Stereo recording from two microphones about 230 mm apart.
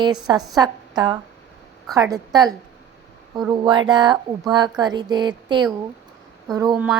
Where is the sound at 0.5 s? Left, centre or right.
Centre.